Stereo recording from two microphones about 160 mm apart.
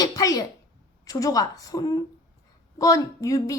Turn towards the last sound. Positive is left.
turn(degrees=20)  # may be behind; listen again after turning